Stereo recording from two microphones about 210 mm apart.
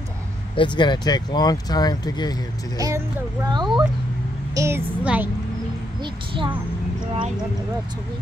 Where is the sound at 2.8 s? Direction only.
15° right (ahead or behind).